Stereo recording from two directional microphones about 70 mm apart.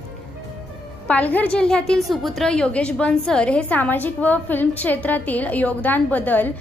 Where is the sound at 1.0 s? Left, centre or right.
Left.